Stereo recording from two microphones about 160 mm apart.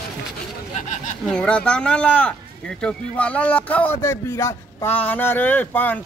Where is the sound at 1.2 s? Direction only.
5° left (ahead or behind).